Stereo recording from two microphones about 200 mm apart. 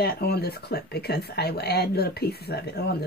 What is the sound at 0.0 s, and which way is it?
Speech, 50° left (ahead or behind).